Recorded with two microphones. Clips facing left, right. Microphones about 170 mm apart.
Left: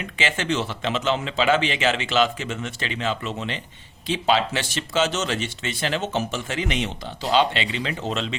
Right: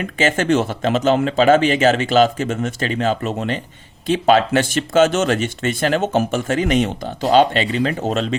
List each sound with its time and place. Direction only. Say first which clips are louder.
0.0 s speech: right 8 dB; 45° right (ahead or behind)